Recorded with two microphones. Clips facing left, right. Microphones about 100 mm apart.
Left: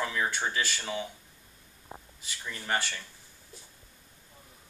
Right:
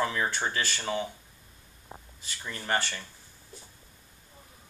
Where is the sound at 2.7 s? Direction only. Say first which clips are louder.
Right 2 dB; 5° left (ahead or behind).